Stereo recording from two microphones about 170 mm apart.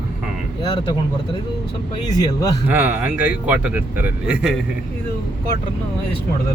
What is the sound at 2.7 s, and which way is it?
A man's voice, 10° right (ahead or behind).